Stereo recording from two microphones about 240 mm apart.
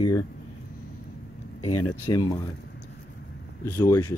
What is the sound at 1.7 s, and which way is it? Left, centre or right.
Speech, left.